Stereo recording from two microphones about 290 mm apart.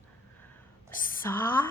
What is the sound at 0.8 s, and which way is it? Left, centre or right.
Speech, centre.